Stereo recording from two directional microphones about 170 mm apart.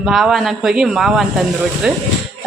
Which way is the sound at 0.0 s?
Centre (ahead or behind).